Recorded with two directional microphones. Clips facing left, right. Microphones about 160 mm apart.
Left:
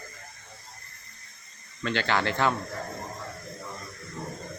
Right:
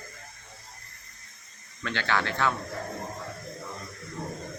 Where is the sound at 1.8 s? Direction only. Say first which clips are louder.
Left 2 dB; 20° left (ahead or behind).